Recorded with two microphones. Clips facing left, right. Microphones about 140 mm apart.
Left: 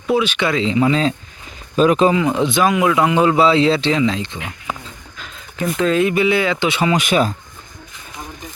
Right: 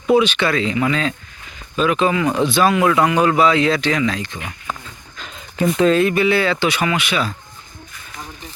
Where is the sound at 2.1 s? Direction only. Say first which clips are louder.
Left 1 dB; 20° left (ahead or behind).